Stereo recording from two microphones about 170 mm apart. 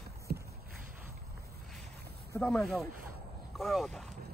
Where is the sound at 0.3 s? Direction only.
60° right (ahead or behind).